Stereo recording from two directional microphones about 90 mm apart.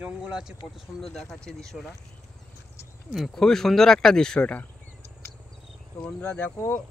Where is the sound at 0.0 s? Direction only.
10° right (ahead or behind).